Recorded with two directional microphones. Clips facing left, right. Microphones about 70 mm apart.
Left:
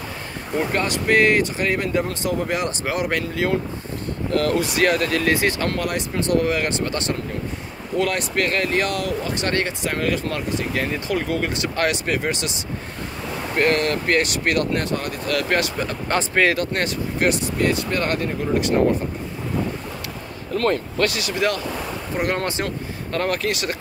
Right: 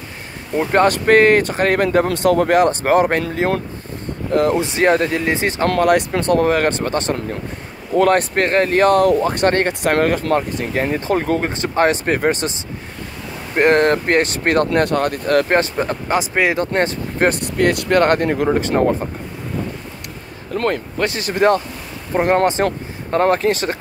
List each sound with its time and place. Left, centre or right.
0.7 s speech: right
4.3 s speech: right
5.7 s speech: right
6.3 s speech: right
7.9 s speech: right
10.7 s speech: right
13.6 s speech: right
14.7 s speech: right
16.1 s speech: centre
16.5 s speech: right
17.3 s speech: right
18.5 s speech: right
21.0 s speech: right
22.2 s speech: right